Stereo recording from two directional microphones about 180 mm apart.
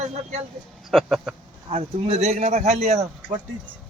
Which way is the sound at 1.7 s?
35° right (ahead or behind).